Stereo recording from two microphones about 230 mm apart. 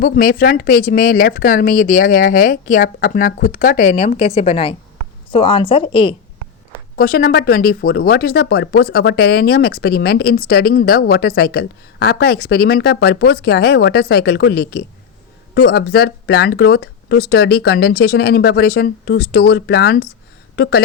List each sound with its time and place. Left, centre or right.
0.0 s a woman's voice: left
6.9 s speech: left